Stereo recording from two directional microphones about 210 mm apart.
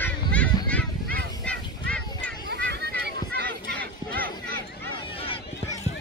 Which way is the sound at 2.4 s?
50° right (ahead or behind).